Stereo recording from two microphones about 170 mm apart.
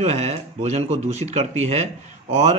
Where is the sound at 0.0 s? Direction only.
40° right (ahead or behind).